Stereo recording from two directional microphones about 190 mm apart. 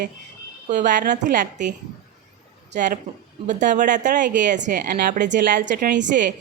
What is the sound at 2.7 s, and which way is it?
A woman's voice, 40° right (ahead or behind).